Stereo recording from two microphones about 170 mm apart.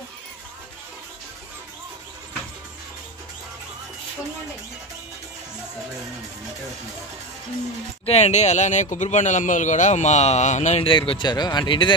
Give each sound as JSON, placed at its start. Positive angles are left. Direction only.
{"t": 8.0, "sound": "a man's voice", "side_deg": 40}
{"t": 10.9, "sound": "speech", "side_deg": 30}